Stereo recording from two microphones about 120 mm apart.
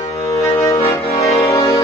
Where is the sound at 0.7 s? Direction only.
25° left (ahead or behind).